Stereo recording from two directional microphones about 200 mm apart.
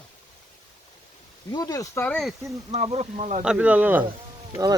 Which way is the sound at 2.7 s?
30° right (ahead or behind).